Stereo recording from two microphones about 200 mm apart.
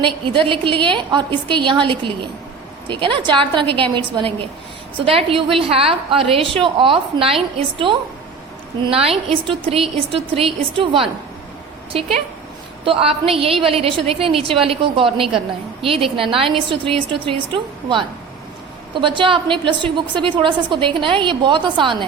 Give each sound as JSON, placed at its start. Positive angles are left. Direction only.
{"t": 0.0, "sound": "a woman's voice", "side_deg": -25}
{"t": 12.8, "sound": "a woman's voice", "side_deg": -25}